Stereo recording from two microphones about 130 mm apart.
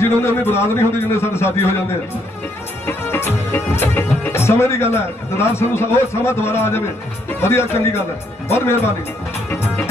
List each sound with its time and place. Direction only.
0.0 s speech: 20° left (ahead or behind)
2.9 s speech: 15° left (ahead or behind)